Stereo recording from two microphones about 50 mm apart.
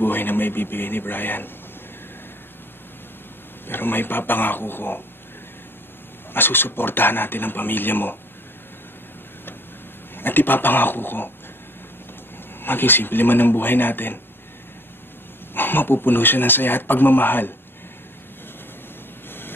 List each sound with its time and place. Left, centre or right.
0.0 s speech: left
3.6 s speech: left
6.3 s speech: left
10.1 s speech: left
12.6 s speech: left
15.5 s speech: left